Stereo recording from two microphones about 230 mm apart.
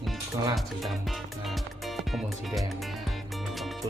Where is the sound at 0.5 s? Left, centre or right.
Centre.